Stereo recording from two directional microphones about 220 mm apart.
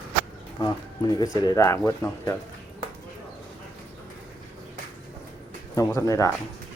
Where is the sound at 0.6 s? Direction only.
20° left (ahead or behind).